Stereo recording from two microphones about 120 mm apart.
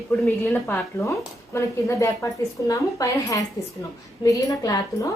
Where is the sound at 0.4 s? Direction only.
20° left (ahead or behind).